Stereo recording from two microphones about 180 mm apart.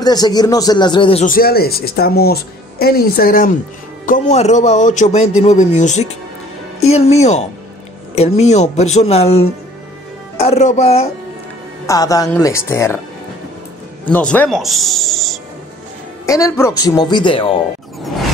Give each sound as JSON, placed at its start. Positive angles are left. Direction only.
{"t": 0.0, "sound": "speech", "side_deg": 20}
{"t": 1.2, "sound": "speech", "side_deg": 55}
{"t": 11.8, "sound": "speech", "side_deg": 20}
{"t": 14.1, "sound": "speech", "side_deg": 10}
{"t": 14.6, "sound": "music", "side_deg": 0}
{"t": 16.3, "sound": "speech", "side_deg": 15}